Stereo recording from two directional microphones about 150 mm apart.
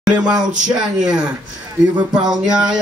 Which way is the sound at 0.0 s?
5° right (ahead or behind).